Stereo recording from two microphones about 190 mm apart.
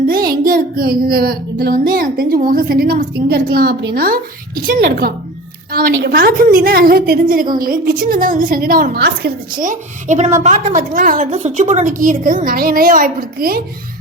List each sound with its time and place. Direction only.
0.1 s child singing: 50° right (ahead or behind)